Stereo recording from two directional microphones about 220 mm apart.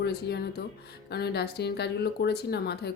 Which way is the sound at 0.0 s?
45° left (ahead or behind).